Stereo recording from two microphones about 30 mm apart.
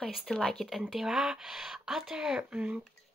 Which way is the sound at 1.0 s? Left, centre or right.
Centre.